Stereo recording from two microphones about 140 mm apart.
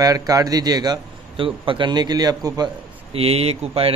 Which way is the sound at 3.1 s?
45° right (ahead or behind).